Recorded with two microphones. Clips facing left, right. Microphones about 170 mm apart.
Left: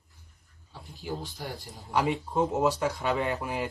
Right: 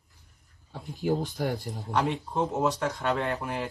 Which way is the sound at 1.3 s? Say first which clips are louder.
Right 9 dB; 60° right (ahead or behind).